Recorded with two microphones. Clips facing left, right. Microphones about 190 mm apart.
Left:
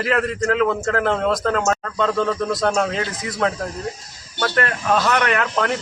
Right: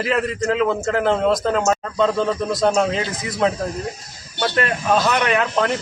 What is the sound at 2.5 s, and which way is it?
Speech, 20° right (ahead or behind).